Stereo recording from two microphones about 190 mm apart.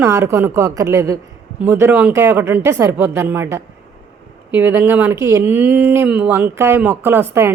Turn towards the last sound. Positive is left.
turn(degrees=-10)  # may be behind; listen again after turning